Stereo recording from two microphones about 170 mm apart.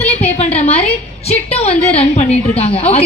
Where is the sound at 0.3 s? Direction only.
40° left (ahead or behind).